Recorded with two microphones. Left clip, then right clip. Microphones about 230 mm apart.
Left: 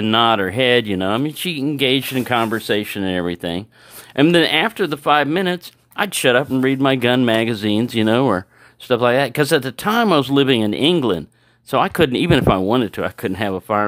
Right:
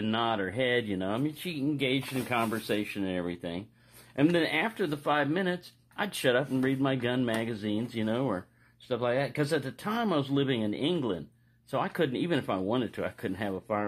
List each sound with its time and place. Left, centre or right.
0.0 s speech: left